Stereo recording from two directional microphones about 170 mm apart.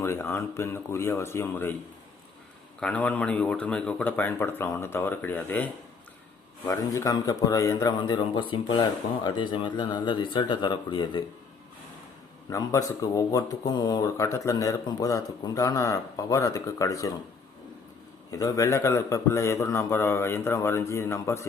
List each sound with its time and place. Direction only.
0.0 s a man's voice: 15° left (ahead or behind)
2.8 s a man's voice: 10° left (ahead or behind)
6.7 s speech: 20° left (ahead or behind)
12.5 s speech: 20° left (ahead or behind)
18.3 s a man's voice: 20° left (ahead or behind)